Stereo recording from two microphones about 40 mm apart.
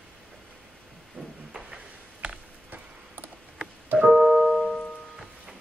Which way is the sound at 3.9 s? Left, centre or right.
Centre.